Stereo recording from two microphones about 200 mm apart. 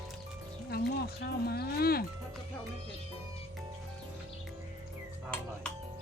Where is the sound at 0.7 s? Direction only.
50° left (ahead or behind).